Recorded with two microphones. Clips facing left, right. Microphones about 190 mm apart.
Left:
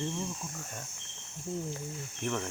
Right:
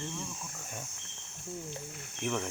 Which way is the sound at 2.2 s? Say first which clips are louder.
Even; 5° right (ahead or behind).